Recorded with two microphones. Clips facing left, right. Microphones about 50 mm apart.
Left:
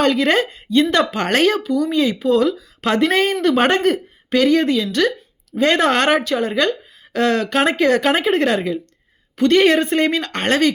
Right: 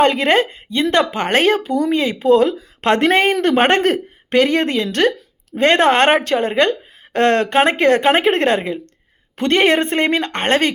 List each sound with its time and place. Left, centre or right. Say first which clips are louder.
0.0 s speech: right 2 dB; right
4.4 s a woman's voice: even; right